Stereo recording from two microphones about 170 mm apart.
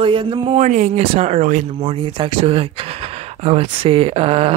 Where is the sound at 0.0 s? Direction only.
30° right (ahead or behind).